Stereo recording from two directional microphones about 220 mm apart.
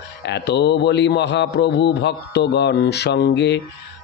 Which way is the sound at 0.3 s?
50° left (ahead or behind).